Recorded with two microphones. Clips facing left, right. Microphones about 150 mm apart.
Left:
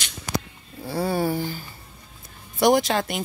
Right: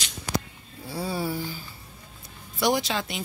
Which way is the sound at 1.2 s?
45° left (ahead or behind).